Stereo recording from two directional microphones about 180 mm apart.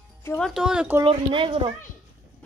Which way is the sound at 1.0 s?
30° right (ahead or behind).